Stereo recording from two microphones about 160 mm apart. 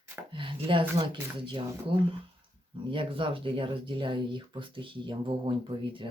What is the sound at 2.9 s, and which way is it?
Speech, 35° right (ahead or behind).